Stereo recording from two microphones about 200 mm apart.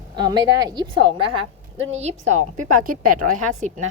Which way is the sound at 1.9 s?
35° right (ahead or behind).